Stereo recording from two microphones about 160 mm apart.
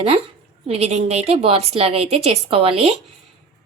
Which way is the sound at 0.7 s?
40° right (ahead or behind).